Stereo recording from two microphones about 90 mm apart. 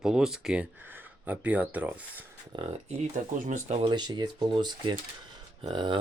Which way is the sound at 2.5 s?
65° right (ahead or behind).